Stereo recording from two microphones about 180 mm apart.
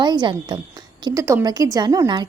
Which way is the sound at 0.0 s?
25° right (ahead or behind).